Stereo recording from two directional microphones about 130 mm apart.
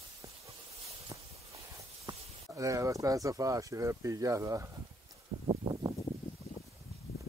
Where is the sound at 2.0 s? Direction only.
25° right (ahead or behind).